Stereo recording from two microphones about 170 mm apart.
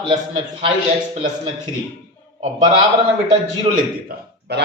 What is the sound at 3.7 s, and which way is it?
Speech, 70° right (ahead or behind).